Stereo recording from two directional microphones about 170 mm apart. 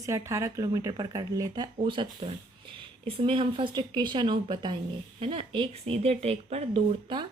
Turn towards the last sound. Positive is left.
turn(degrees=-30)  # may be behind; listen again after turning